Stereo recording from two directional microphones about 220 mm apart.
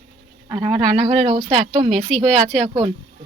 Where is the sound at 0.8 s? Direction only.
Centre (ahead or behind).